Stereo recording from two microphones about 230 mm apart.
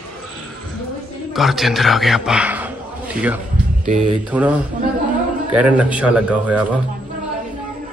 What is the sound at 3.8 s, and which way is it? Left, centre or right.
Speech, right.